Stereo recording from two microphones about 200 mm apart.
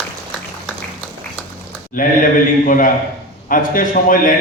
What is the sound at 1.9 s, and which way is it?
A man's voice, 45° left (ahead or behind).